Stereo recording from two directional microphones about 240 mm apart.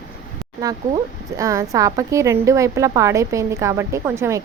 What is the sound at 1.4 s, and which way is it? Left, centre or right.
A woman's voice, centre.